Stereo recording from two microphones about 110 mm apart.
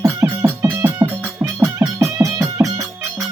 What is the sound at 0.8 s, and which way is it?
Music, 15° right (ahead or behind).